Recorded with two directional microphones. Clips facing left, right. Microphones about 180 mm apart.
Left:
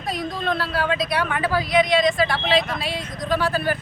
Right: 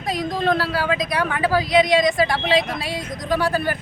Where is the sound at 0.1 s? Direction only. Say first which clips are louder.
Right 3 dB; 90° right.